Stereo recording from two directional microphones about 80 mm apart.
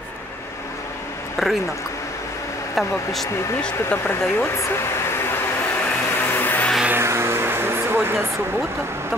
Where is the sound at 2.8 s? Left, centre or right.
Left.